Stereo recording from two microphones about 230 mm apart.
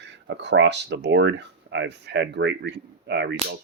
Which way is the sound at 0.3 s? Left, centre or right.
Right.